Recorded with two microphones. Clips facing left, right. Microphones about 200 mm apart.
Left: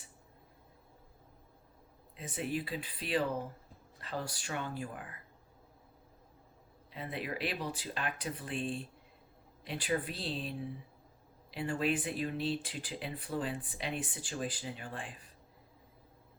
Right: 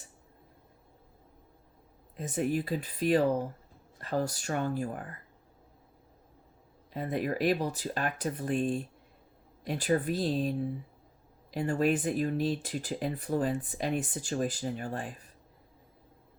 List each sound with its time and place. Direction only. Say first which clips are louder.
2.1 s speech: right 7 dB; 45° right (ahead or behind)
6.9 s speech: right 8 dB; 45° right (ahead or behind)